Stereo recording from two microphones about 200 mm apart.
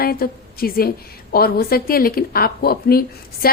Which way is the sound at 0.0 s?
50° left (ahead or behind).